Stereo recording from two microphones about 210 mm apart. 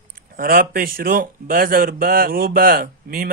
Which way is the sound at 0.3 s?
45° right (ahead or behind).